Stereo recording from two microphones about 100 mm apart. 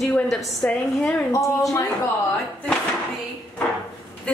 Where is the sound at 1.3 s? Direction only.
35° left (ahead or behind).